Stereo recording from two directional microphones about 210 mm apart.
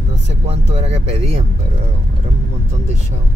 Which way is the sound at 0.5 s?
30° right (ahead or behind).